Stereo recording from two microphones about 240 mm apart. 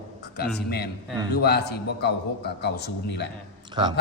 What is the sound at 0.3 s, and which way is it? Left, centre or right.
A man's voice, left.